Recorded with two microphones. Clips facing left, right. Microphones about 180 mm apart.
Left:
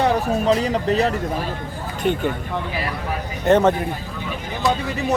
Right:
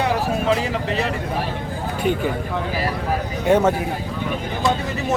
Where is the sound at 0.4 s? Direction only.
40° left (ahead or behind).